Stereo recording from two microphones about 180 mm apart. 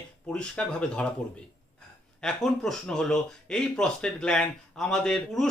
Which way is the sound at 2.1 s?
5° left (ahead or behind).